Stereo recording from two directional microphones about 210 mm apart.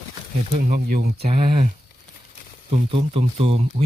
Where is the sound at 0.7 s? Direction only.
45° right (ahead or behind).